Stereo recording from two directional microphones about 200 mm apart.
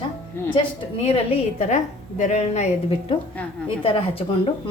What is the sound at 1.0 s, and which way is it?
A woman's voice, 30° left (ahead or behind).